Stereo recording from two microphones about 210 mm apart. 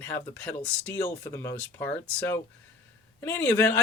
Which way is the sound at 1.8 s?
10° left (ahead or behind).